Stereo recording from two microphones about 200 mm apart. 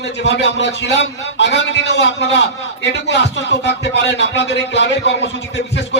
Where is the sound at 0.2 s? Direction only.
60° left (ahead or behind).